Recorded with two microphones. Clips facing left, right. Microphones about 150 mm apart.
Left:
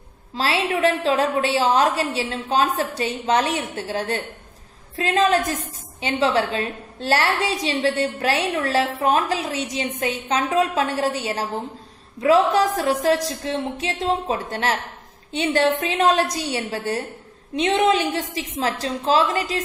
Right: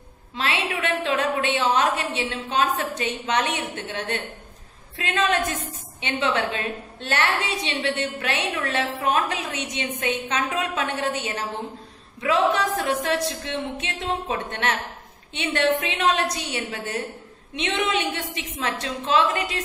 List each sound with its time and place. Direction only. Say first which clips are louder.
0.4 s a woman's voice: left 6 dB; 35° left (ahead or behind)